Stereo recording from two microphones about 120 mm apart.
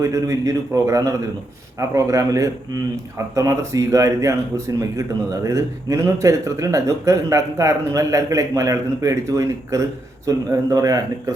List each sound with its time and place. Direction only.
0.0 s speech: 25° right (ahead or behind)